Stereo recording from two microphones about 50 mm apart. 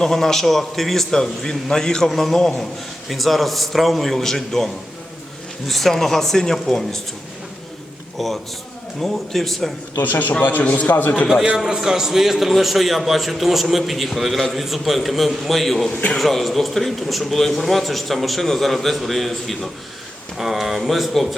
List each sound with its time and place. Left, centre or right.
0.0 s a man's voice: centre
8.2 s a man's voice: centre
10.0 s a man's voice: left
11.5 s a man's voice: centre